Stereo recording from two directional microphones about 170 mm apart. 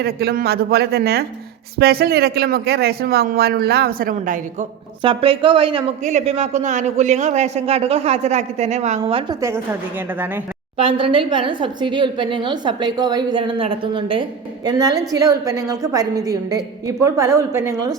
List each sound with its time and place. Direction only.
0.0 s speech: 65° right (ahead or behind)
5.0 s a man's voice: 30° right (ahead or behind)
6.0 s a man's voice: 45° right (ahead or behind)
10.8 s a woman's voice: 30° right (ahead or behind)